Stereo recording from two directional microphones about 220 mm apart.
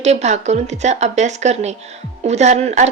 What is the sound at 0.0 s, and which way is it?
Speech, 30° right (ahead or behind).